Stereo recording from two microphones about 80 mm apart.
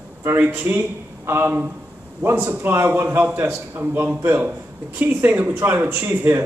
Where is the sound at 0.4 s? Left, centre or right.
Right.